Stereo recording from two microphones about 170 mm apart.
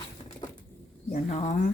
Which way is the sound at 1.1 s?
45° left (ahead or behind).